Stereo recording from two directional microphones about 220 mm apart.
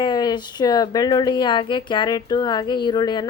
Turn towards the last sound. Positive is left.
turn(degrees=20)  # may be behind; listen again after turning